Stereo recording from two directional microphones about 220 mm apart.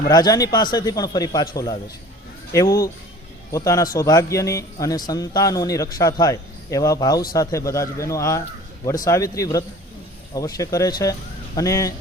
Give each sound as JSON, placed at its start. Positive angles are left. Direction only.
{"t": 0.1, "sound": "speech", "side_deg": 15}